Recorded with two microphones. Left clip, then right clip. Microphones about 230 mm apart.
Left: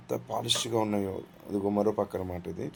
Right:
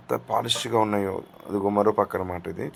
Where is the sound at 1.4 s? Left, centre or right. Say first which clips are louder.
Right 5 dB; centre.